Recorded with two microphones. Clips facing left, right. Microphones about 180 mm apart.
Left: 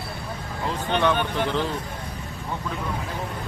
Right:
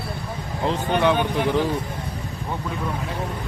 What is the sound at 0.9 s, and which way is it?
Speech, 10° right (ahead or behind).